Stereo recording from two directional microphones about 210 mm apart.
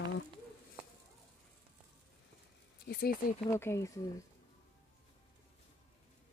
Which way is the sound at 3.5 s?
10° left (ahead or behind).